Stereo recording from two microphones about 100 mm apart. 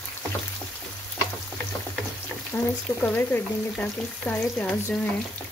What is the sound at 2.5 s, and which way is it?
Speech, 25° left (ahead or behind).